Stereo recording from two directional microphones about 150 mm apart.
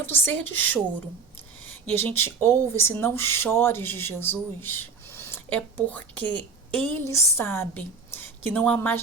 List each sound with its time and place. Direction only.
0.0 s speech: 15° left (ahead or behind)